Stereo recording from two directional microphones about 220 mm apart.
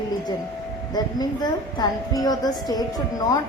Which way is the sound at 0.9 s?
15° left (ahead or behind).